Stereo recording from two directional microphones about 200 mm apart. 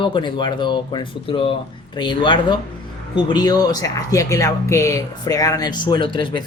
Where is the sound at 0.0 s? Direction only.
25° left (ahead or behind).